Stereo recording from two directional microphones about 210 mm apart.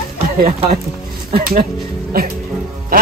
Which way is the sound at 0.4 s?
30° right (ahead or behind).